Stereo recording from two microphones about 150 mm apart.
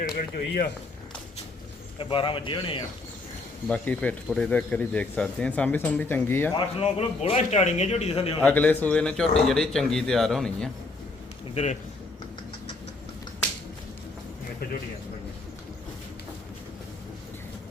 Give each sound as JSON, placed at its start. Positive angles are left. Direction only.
{"t": 0.0, "sound": "speech", "side_deg": 75}
{"t": 2.0, "sound": "a man's voice", "side_deg": 35}
{"t": 3.7, "sound": "speech", "side_deg": 10}
{"t": 6.7, "sound": "a man's voice", "side_deg": 45}
{"t": 8.4, "sound": "a man's voice", "side_deg": 10}
{"t": 11.5, "sound": "a man's voice", "side_deg": 50}
{"t": 14.6, "sound": "speech", "side_deg": 90}